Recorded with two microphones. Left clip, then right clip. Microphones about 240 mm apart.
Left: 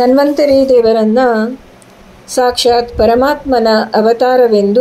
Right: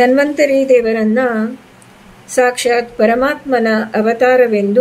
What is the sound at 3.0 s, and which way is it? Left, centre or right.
Speech, centre.